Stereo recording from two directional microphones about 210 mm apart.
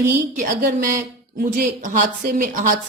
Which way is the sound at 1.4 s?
40° right (ahead or behind).